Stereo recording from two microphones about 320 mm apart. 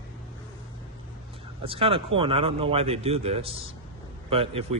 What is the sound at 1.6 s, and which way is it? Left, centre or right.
Speech, centre.